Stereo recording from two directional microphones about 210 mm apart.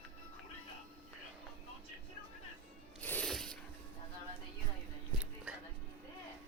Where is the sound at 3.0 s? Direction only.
5° left (ahead or behind).